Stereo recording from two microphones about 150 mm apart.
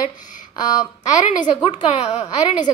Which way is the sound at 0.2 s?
60° left (ahead or behind).